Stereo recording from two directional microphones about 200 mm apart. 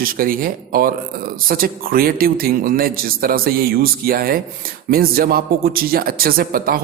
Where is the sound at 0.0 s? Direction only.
45° right (ahead or behind).